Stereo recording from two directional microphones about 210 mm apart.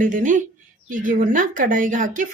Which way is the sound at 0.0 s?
40° right (ahead or behind).